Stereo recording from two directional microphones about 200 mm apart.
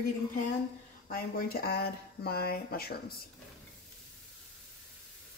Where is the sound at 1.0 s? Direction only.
50° left (ahead or behind).